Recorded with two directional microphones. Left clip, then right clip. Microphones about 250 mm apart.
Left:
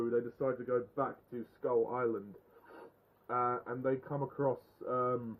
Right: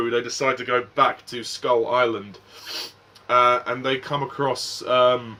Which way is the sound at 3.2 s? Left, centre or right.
Centre.